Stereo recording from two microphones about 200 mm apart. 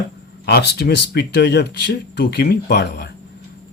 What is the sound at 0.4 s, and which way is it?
Speech, 55° left (ahead or behind).